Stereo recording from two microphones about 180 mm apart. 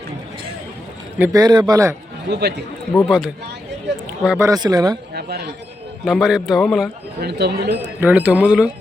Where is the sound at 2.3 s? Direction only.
70° right (ahead or behind).